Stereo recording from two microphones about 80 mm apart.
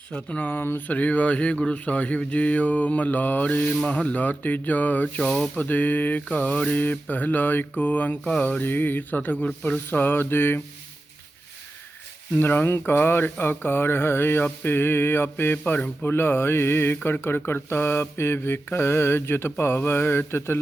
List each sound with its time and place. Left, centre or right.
0.1 s speech: centre
12.4 s speech: left